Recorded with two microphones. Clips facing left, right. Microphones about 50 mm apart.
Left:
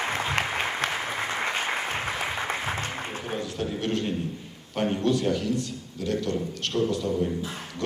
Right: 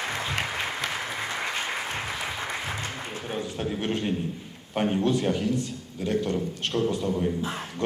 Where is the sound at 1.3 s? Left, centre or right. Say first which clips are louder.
Left 3 dB; left.